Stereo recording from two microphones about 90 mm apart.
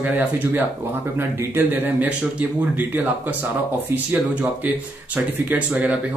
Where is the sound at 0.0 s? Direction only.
20° right (ahead or behind).